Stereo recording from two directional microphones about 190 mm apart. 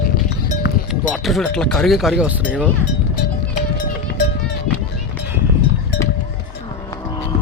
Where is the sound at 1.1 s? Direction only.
Centre (ahead or behind).